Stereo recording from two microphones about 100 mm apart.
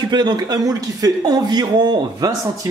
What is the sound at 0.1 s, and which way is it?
Speech, 45° right (ahead or behind).